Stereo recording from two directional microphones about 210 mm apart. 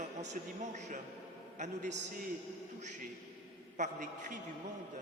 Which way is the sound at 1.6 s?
35° right (ahead or behind).